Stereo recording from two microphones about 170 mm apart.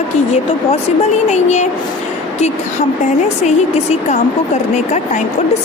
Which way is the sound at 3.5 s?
40° left (ahead or behind).